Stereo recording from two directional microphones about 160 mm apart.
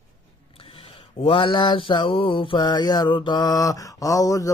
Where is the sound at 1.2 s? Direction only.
35° left (ahead or behind).